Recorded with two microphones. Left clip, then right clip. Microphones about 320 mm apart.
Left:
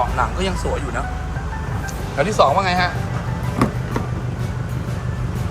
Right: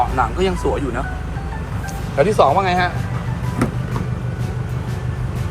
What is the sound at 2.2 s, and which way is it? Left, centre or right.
Speech, centre.